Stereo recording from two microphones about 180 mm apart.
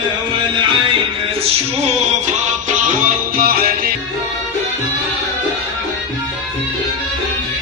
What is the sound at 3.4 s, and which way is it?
Music, 55° right (ahead or behind).